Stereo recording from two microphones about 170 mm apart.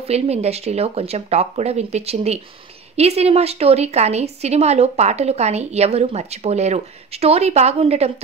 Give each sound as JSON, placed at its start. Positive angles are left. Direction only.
{"t": 0.0, "sound": "speech", "side_deg": -40}